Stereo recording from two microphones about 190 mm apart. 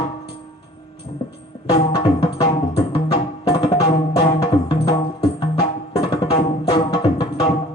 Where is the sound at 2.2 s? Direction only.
20° left (ahead or behind).